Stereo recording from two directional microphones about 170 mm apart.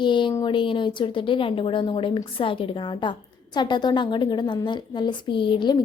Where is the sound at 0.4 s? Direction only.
30° left (ahead or behind).